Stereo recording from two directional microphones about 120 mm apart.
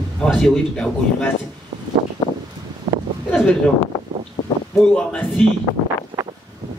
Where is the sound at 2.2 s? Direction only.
45° left (ahead or behind).